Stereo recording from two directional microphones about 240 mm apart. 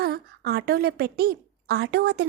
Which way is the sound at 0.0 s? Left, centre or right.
Right.